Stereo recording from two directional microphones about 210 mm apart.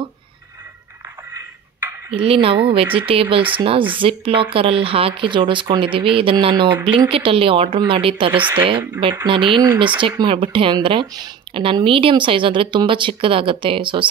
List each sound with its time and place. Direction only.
1.3 s a sound: 10° right (ahead or behind)
2.2 s speech: 25° right (ahead or behind)
8.3 s speech: 10° right (ahead or behind)
9.2 s speech: 25° right (ahead or behind)